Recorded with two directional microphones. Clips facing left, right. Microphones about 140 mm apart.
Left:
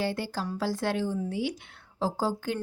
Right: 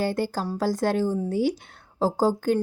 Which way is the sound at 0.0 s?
45° right (ahead or behind).